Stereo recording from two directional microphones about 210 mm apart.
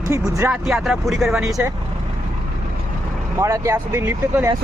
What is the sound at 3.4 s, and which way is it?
Speech, 15° right (ahead or behind).